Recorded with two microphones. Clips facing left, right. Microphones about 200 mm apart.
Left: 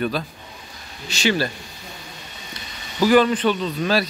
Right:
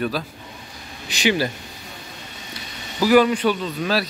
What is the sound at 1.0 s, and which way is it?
Speech, 15° right (ahead or behind).